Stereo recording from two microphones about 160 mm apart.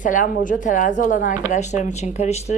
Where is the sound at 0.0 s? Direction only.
55° left (ahead or behind).